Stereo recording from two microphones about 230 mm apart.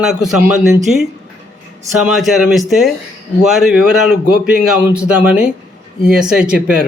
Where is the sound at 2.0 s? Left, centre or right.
Centre.